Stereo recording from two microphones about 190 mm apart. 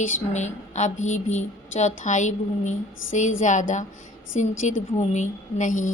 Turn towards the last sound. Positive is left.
turn(degrees=40)  # may be behind; listen again after turning